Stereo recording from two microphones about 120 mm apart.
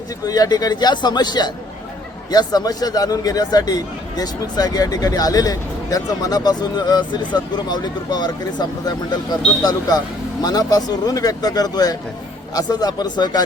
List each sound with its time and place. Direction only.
0.3 s speech: 30° left (ahead or behind)
10.4 s speech: 30° left (ahead or behind)